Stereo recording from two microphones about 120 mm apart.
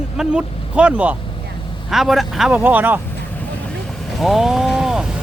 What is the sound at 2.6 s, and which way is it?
Speech, 15° right (ahead or behind).